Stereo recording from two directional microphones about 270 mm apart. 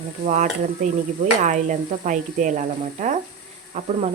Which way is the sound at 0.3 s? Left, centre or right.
Right.